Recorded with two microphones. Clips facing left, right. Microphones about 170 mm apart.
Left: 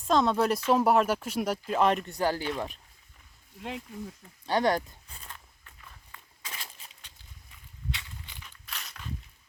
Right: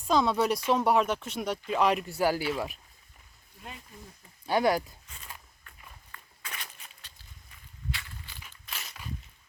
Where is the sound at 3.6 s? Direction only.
90° left.